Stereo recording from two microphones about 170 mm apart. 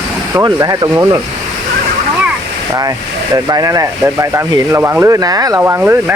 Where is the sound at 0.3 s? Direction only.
25° right (ahead or behind).